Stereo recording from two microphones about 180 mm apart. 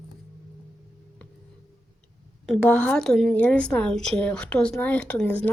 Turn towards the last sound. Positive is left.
turn(degrees=5)  # may be behind; listen again after turning